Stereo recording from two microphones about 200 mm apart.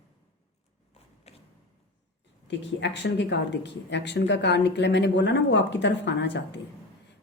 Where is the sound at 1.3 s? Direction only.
30° left (ahead or behind).